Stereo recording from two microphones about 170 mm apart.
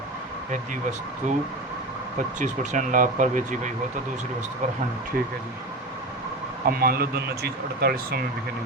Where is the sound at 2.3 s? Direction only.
45° right (ahead or behind).